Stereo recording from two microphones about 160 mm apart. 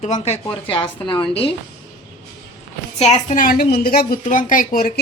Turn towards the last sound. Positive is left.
turn(degrees=60)  # may be behind; listen again after turning